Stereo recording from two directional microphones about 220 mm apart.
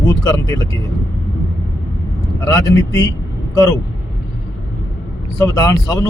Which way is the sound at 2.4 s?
15° left (ahead or behind).